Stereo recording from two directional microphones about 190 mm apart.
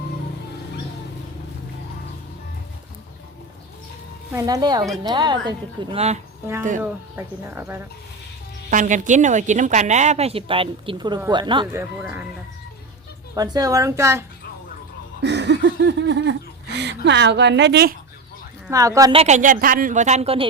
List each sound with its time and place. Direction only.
4.3 s a woman's voice: 15° right (ahead or behind)
6.8 s speech: 10° right (ahead or behind)
8.7 s a woman's voice: 40° right (ahead or behind); by 11.7 s 25° right (ahead or behind)
11.7 s speech: 10° right (ahead or behind)
13.3 s speech: 20° right (ahead or behind)
15.2 s speech: 65° right (ahead or behind)
18.7 s speech: 15° right (ahead or behind)
19.1 s a woman's voice: 35° right (ahead or behind)